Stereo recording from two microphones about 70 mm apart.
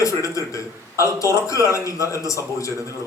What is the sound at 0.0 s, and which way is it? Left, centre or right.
A man's voice, left.